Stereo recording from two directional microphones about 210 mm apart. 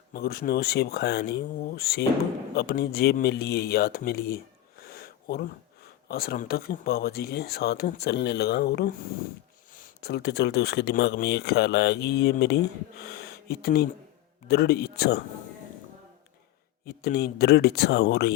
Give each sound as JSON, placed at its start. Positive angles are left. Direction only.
{"t": 0.1, "sound": "speech", "side_deg": 45}
{"t": 4.8, "sound": "a sound", "side_deg": 45}
{"t": 6.1, "sound": "speech", "side_deg": 45}
{"t": 16.8, "sound": "speech", "side_deg": 50}